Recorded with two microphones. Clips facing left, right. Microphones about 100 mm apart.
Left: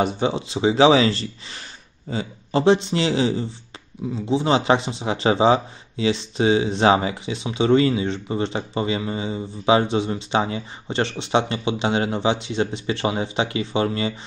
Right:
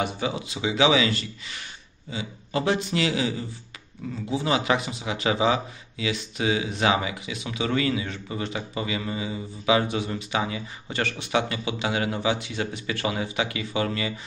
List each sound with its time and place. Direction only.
0.0 s speech: 30° left (ahead or behind)
2.6 s speech: 25° left (ahead or behind)